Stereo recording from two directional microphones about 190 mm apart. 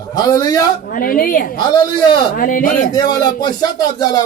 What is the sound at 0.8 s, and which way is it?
A woman's voice, 50° left (ahead or behind).